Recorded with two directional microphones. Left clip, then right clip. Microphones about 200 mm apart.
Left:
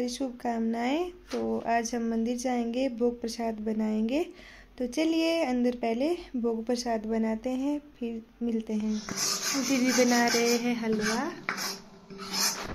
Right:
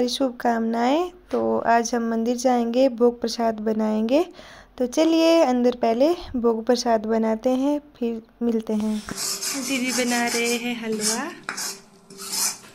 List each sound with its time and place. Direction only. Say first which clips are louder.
0.0 s speech: right 10 dB; 15° right (ahead or behind)
1.6 s speech: right 8 dB; 15° right (ahead or behind)
9.7 s speech: right 1 dB; centre (ahead or behind)